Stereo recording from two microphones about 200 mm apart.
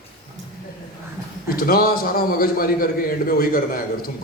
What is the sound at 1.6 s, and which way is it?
A man's voice, 50° left (ahead or behind).